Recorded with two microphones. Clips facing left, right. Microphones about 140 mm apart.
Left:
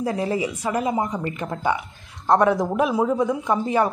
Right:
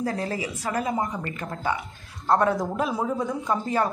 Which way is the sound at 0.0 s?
20° left (ahead or behind).